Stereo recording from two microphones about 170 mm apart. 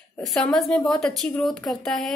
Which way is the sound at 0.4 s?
5° left (ahead or behind).